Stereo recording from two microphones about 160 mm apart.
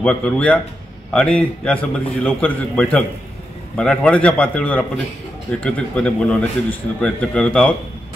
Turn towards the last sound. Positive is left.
turn(degrees=5)  # may be behind; listen again after turning